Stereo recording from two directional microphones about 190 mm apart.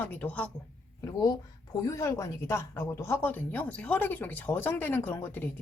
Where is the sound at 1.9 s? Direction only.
15° left (ahead or behind).